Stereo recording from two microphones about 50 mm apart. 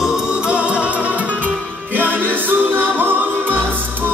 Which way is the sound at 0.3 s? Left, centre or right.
Right.